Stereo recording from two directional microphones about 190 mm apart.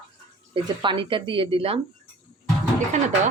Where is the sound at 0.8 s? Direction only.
25° right (ahead or behind).